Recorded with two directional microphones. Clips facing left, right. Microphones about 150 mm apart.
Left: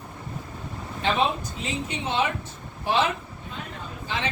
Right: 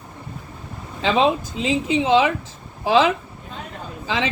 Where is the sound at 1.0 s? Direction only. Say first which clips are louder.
Right 6 dB; 90° right.